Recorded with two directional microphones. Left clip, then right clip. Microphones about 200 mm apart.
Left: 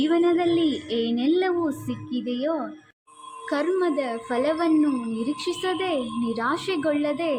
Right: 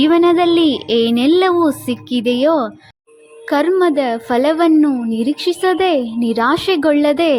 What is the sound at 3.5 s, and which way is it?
A woman's voice, 45° right (ahead or behind).